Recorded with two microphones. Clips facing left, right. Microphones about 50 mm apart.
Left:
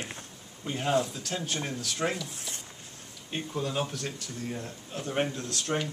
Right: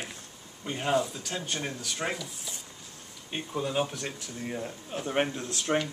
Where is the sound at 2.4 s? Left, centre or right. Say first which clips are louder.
Left 1 dB; left.